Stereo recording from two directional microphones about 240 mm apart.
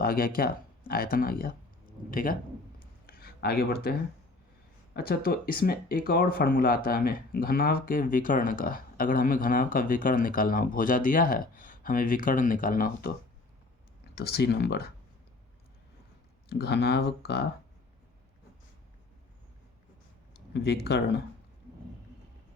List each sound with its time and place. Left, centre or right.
0.0 s speech: left
3.1 s a sound: left
4.9 s speech: left
14.2 s speech: left
16.5 s speech: left
20.5 s speech: left